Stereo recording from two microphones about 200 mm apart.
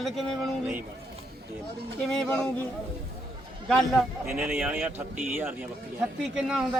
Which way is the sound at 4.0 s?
5° right (ahead or behind).